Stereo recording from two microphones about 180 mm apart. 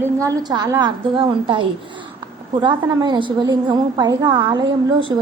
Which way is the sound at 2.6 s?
25° right (ahead or behind).